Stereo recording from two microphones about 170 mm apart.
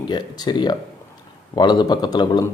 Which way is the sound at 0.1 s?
25° left (ahead or behind).